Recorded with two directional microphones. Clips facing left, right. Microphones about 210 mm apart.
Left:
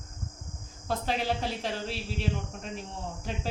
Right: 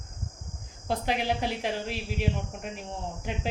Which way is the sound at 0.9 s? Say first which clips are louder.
Right 2 dB; 15° right (ahead or behind).